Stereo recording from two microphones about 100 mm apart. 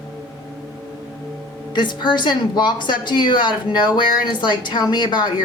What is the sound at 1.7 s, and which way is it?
Speech, 45° left (ahead or behind).